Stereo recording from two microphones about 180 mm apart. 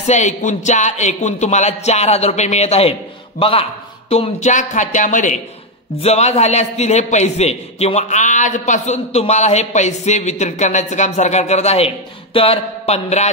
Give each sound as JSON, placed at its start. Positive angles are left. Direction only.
{"t": 0.0, "sound": "a man's voice", "side_deg": 40}